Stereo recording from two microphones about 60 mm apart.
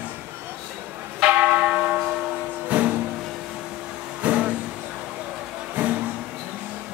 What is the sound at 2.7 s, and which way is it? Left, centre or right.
Music, right.